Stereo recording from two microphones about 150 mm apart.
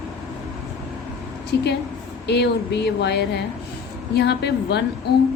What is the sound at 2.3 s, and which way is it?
Speech, 90° left.